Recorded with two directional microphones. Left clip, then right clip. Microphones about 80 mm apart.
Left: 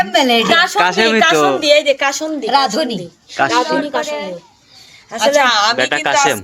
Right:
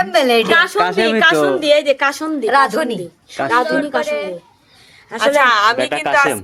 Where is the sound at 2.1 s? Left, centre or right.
Right.